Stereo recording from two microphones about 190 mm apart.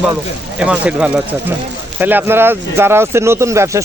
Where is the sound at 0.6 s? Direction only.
5° right (ahead or behind).